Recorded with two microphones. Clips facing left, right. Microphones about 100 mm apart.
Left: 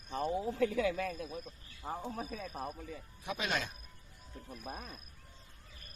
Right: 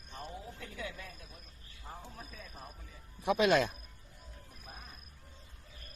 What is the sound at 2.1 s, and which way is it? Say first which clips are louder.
Speech: left 9 dB; 85° left.